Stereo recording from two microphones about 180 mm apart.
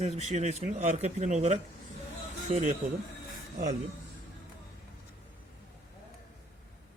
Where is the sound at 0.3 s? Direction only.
40° right (ahead or behind).